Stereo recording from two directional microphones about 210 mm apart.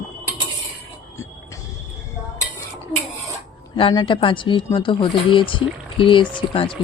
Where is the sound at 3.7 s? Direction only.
25° left (ahead or behind).